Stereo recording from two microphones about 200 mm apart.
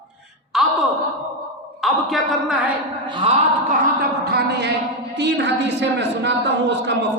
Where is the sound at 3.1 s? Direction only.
25° right (ahead or behind).